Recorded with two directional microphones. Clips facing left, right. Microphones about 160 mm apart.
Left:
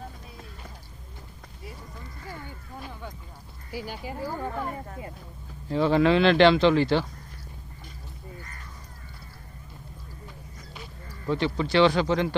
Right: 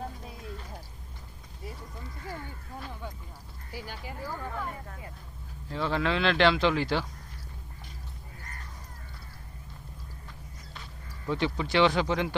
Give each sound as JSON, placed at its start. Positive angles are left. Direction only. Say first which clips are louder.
{"t": 3.7, "sound": "a woman's voice", "louder": "left 6 dB", "side_deg": 15}
{"t": 5.6, "sound": "speech", "louder": "left 8 dB", "side_deg": 5}
{"t": 11.3, "sound": "speech", "louder": "left 3 dB", "side_deg": -10}